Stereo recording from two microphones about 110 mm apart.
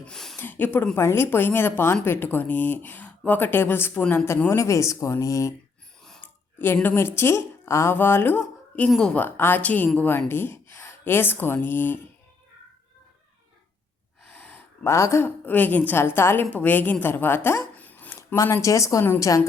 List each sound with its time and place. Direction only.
0.0 s a sound: 5° left (ahead or behind)
0.3 s a woman's voice: 15° left (ahead or behind)
4.0 s speech: 10° left (ahead or behind)
4.4 s a woman's voice: 25° left (ahead or behind)
6.2 s a sound: 20° left (ahead or behind)
6.8 s a woman's voice: 20° left (ahead or behind)
14.8 s a woman's voice: 25° left (ahead or behind)